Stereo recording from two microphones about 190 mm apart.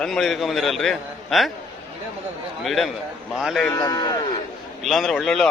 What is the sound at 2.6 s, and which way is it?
A man's voice, centre (ahead or behind).